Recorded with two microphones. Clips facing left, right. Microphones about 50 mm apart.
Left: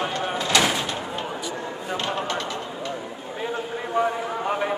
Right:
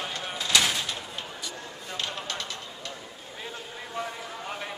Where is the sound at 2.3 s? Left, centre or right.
Centre.